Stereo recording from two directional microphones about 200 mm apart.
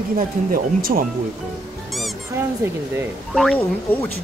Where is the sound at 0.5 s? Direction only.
45° right (ahead or behind).